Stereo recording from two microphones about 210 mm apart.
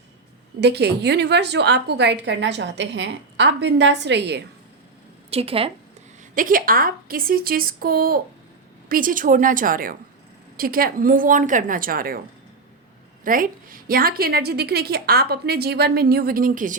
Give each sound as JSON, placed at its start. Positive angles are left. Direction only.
{"t": 0.6, "sound": "a woman's voice", "side_deg": -55}
{"t": 5.3, "sound": "a woman's voice", "side_deg": -25}
{"t": 6.3, "sound": "a woman's voice", "side_deg": -40}
{"t": 13.2, "sound": "a woman's voice", "side_deg": -40}